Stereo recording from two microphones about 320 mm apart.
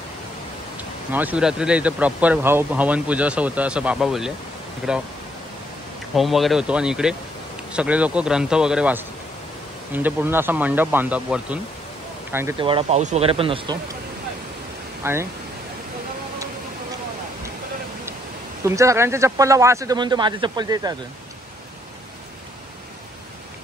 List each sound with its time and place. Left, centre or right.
1.1 s speech: centre
6.1 s speech: centre
15.0 s speech: centre
18.6 s speech: centre